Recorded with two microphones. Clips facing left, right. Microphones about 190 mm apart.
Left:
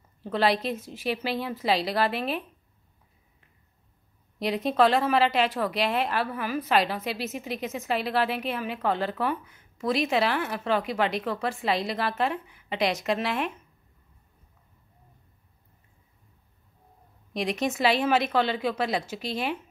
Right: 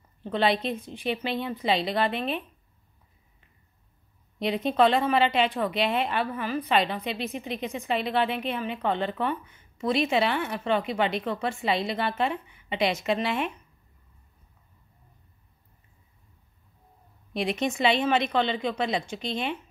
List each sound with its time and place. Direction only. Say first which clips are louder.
0.2 s a woman's voice: even; centre (ahead or behind)
4.4 s a woman's voice: even; centre (ahead or behind)
17.3 s a woman's voice: even; centre (ahead or behind)